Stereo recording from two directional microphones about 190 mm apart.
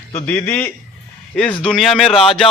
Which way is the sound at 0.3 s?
10° left (ahead or behind).